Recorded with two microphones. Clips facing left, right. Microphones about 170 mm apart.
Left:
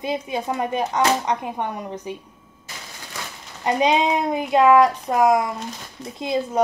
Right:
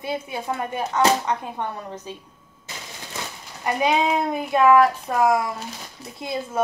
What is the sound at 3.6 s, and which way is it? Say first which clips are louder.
Speech: left 2 dB; 20° left (ahead or behind).